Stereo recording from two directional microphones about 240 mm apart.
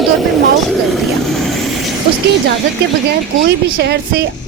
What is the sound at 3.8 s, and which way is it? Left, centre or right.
Speech, right.